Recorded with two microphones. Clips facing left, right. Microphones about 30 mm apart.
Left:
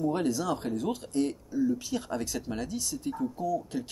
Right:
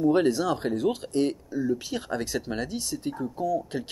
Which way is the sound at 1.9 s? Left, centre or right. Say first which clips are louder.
Right 2 dB; right.